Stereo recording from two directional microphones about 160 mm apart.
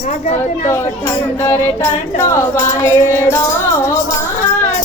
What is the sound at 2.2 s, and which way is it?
Music, 20° left (ahead or behind).